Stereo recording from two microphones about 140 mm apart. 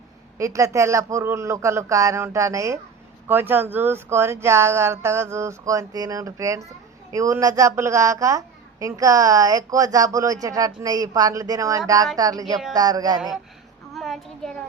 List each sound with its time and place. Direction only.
0.3 s a woman's voice: 20° right (ahead or behind)
13.9 s a child's voice: centre (ahead or behind)